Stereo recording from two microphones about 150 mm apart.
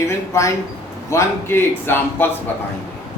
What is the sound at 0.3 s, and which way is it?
A man's voice, 20° left (ahead or behind).